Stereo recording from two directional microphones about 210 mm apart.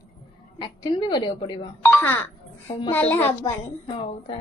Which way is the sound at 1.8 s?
10° left (ahead or behind).